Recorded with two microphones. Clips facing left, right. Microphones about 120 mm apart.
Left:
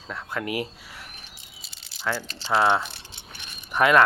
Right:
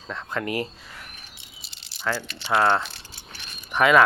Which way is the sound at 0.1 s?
5° left (ahead or behind).